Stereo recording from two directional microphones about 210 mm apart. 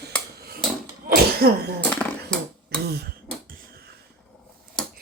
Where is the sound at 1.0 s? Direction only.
45° right (ahead or behind).